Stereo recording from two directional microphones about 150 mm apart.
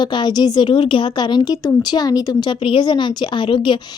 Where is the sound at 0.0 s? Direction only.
30° left (ahead or behind).